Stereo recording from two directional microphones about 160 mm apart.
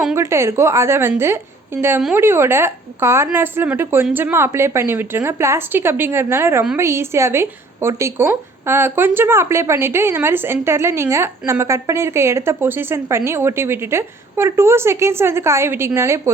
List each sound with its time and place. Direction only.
0.2 s speech: 15° right (ahead or behind)